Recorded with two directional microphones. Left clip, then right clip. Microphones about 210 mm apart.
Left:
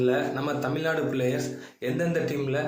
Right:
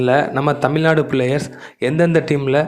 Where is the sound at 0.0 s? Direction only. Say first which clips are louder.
Right 10 dB; 40° right (ahead or behind).